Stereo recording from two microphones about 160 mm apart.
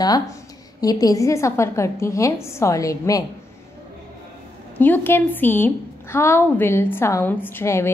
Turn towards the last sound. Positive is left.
turn(degrees=15)  # may be behind; listen again after turning